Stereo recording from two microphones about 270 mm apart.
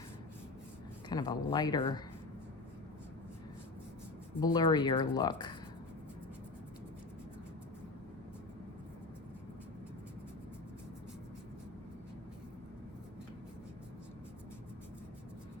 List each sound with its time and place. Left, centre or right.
1.1 s speech: centre
4.4 s speech: centre